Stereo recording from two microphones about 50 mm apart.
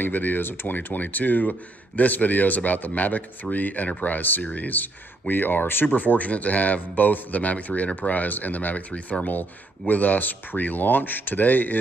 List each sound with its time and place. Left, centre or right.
0.0 s speech: left
5.9 s speech: left